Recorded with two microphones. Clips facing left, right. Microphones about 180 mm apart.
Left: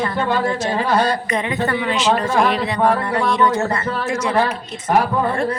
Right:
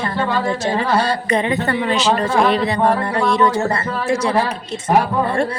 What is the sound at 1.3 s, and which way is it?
Speech, 30° right (ahead or behind).